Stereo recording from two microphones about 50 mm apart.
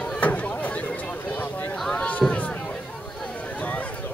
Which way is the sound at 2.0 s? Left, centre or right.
Left.